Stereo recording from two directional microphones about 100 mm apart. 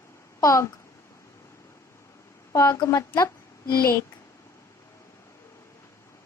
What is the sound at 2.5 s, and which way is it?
A woman's voice, 30° left (ahead or behind).